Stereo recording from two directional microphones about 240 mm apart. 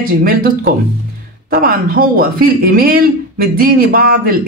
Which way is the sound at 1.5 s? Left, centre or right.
Right.